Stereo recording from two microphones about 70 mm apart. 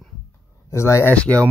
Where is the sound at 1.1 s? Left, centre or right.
Centre.